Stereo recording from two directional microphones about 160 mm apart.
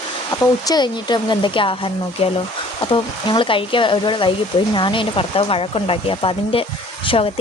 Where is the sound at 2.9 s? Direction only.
30° left (ahead or behind).